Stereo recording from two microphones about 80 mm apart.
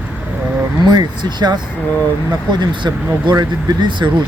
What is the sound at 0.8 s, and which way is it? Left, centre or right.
Speech, right.